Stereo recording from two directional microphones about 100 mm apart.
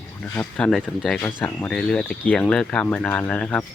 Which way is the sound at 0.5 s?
10° left (ahead or behind).